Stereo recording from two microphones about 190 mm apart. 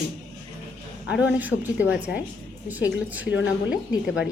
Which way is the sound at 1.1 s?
5° right (ahead or behind).